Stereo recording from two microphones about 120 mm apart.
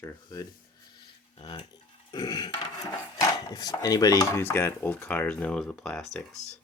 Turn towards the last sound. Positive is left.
turn(degrees=10)  # may be behind; listen again after turning